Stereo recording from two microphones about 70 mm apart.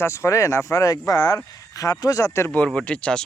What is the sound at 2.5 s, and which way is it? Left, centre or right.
Speech, centre.